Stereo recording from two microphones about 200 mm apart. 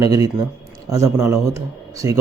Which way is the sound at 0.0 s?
20° right (ahead or behind).